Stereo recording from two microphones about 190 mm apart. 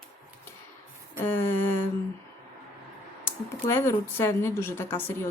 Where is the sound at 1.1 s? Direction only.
10° left (ahead or behind).